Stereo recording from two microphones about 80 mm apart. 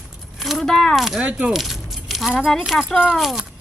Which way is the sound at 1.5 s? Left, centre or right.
Centre.